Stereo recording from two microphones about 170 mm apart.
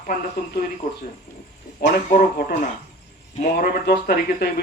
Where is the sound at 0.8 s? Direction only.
45° left (ahead or behind).